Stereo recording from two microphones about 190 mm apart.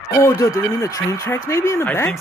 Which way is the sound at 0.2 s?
15° left (ahead or behind).